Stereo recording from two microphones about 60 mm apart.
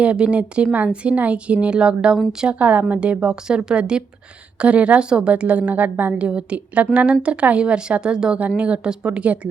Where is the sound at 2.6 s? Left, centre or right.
Right.